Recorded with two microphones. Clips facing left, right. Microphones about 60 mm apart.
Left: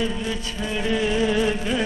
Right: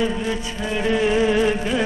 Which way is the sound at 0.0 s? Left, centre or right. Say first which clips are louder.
Right 3 dB; centre.